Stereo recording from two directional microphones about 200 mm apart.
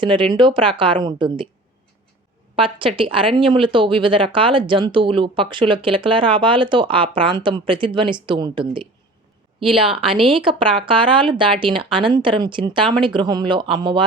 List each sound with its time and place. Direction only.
0.0 s speech: 25° right (ahead or behind)
2.6 s speech: 25° right (ahead or behind)